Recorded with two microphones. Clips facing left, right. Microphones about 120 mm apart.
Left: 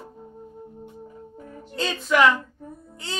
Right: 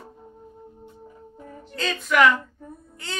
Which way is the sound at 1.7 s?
25° left (ahead or behind).